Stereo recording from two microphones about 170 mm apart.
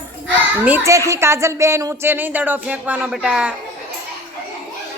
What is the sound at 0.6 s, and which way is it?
Speech, 15° right (ahead or behind).